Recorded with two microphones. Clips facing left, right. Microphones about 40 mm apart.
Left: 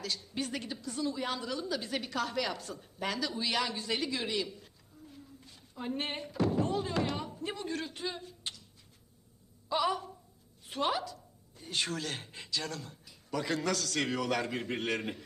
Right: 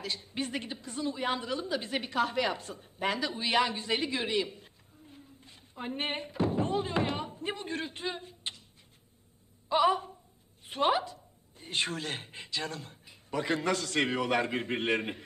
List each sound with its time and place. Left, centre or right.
0.0 s a woman's voice: right
9.6 s speech: right